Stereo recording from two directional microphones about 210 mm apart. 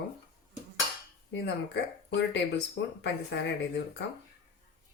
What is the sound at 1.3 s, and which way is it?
Speech, 55° left (ahead or behind).